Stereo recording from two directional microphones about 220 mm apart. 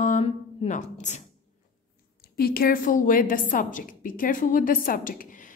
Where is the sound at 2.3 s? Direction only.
40° left (ahead or behind).